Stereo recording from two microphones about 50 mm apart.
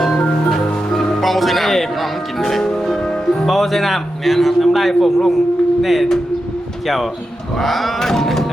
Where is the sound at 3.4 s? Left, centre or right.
Centre.